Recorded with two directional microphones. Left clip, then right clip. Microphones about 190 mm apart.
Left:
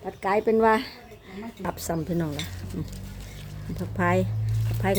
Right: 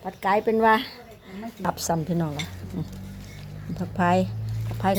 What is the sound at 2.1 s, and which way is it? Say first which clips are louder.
Speech: right 1 dB; 20° left (ahead or behind).